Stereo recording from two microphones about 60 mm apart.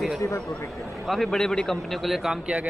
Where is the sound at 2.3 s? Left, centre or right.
Centre.